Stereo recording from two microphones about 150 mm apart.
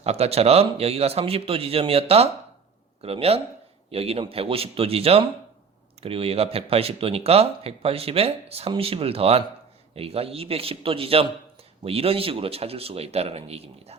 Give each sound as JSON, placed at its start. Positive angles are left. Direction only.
{"t": 0.0, "sound": "speech", "side_deg": -45}